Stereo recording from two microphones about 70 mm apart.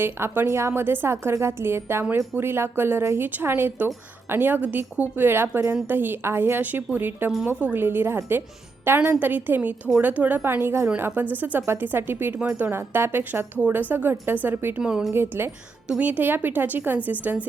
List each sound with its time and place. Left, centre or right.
0.0 s a woman's voice: right
14.8 s speech: centre
15.1 s speech: right
15.9 s a woman's voice: right